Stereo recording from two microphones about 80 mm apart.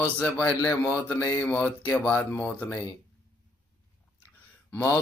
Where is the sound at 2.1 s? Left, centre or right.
Left.